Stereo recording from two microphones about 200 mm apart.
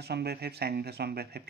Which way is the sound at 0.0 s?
55° right (ahead or behind).